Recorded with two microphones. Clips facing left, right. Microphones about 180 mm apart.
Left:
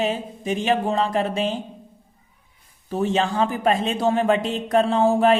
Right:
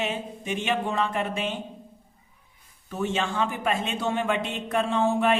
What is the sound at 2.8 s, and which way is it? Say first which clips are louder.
A man's voice: left 6 dB; 35° left (ahead or behind).